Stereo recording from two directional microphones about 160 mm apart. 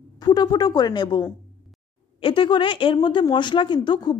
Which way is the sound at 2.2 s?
30° left (ahead or behind).